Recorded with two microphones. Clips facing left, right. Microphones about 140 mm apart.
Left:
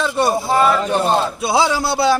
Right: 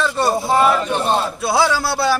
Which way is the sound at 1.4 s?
20° left (ahead or behind).